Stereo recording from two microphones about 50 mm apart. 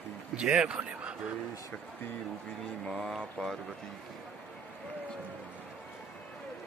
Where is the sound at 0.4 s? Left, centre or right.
Centre.